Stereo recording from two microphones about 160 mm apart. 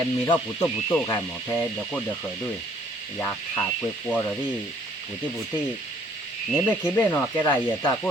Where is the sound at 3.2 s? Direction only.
20° left (ahead or behind).